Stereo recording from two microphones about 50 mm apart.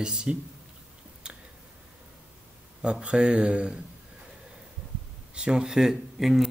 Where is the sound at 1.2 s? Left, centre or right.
Centre.